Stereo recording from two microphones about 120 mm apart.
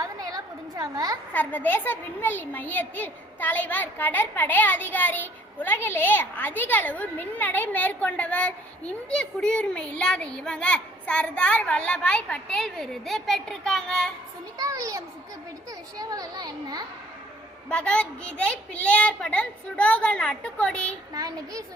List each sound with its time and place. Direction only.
0.0 s a sound: 30° right (ahead or behind)
1.3 s a child's voice: 15° left (ahead or behind)
14.6 s a child's voice: 25° right (ahead or behind)
17.7 s a child's voice: 10° left (ahead or behind)
21.1 s a child's voice: 30° right (ahead or behind)